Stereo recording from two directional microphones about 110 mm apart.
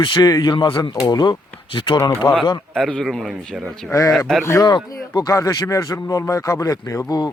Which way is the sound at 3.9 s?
30° left (ahead or behind).